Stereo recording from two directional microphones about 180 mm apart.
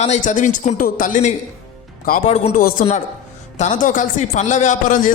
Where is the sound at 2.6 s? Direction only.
55° left (ahead or behind).